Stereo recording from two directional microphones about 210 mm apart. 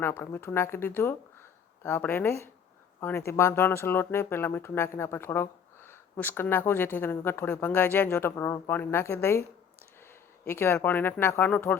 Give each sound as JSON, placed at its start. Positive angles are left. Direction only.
{"t": 0.0, "sound": "speech", "side_deg": 10}